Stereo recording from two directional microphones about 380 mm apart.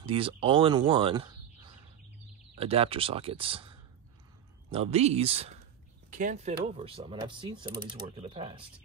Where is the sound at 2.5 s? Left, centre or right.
Centre.